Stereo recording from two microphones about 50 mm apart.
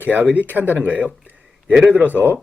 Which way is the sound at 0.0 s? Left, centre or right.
Right.